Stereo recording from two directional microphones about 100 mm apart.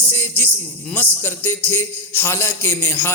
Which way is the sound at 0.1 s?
20° left (ahead or behind).